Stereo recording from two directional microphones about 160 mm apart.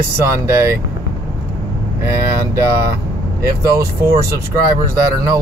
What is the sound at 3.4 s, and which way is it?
Speech, 20° right (ahead or behind).